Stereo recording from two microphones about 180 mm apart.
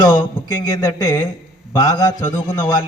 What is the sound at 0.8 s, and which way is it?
A man's voice, 20° left (ahead or behind).